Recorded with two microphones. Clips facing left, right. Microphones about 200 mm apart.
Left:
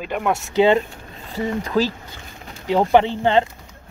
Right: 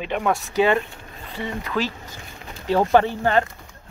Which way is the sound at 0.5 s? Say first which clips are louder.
Left 4 dB; 25° left (ahead or behind).